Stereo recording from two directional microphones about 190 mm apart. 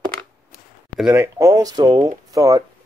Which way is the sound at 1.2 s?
15° right (ahead or behind).